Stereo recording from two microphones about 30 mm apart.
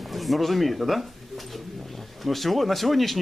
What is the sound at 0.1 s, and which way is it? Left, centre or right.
Speech, centre.